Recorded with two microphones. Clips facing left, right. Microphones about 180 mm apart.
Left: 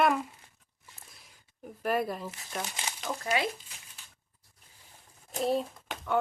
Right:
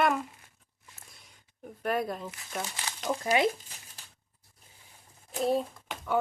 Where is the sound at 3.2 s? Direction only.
20° right (ahead or behind).